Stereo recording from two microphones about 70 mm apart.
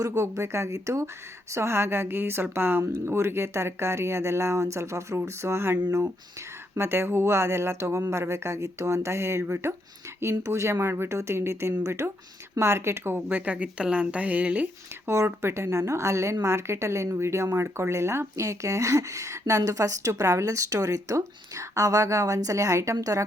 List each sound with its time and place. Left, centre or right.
0.1 s a woman's voice: right
6.7 s a woman's voice: right
15.0 s a woman's voice: right